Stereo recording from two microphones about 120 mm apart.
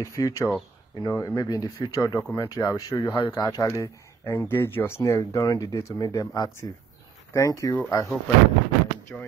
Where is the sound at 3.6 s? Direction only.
25° left (ahead or behind).